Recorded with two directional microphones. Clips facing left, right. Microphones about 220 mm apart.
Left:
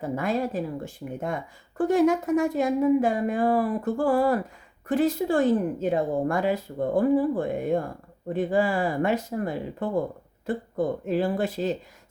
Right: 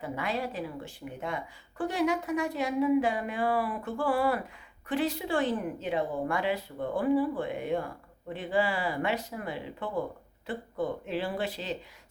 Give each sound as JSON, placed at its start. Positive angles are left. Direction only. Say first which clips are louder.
{"t": 0.0, "sound": "a woman's voice", "louder": "left 6 dB", "side_deg": 45}